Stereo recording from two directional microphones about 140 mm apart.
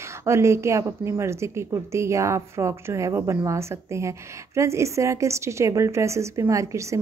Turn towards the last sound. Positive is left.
turn(degrees=-20)  # may be behind; listen again after turning